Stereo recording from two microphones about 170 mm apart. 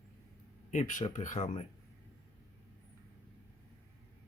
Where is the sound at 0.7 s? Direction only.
45° left (ahead or behind).